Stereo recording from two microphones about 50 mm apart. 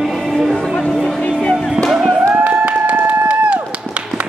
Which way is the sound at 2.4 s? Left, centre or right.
Right.